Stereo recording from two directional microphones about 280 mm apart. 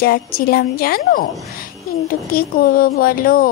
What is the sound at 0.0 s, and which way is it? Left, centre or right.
A child's voice, left.